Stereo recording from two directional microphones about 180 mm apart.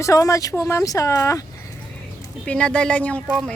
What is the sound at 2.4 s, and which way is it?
Speech, 5° left (ahead or behind).